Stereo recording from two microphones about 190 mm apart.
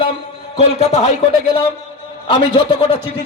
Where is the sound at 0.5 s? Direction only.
35° left (ahead or behind).